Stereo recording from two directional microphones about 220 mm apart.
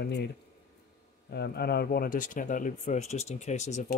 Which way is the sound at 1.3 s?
45° left (ahead or behind).